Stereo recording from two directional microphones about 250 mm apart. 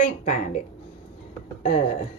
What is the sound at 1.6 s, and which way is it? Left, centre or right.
Speech, left.